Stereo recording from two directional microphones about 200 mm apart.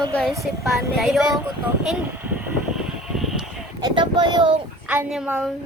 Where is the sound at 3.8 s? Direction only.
20° right (ahead or behind).